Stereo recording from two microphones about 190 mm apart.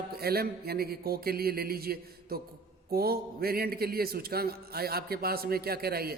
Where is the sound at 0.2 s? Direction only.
55° right (ahead or behind).